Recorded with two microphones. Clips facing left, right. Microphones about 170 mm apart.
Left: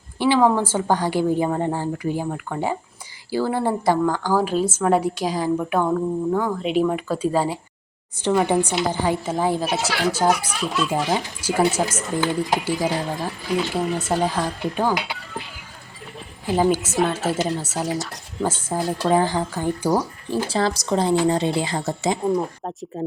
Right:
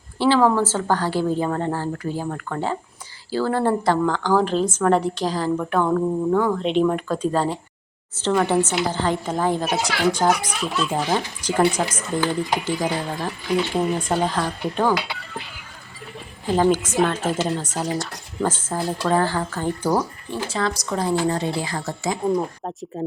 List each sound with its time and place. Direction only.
0.2 s a woman's voice: 15° left (ahead or behind)
16.5 s a woman's voice: 10° left (ahead or behind)
20.3 s speech: 35° left (ahead or behind)
22.4 s speech: centre (ahead or behind)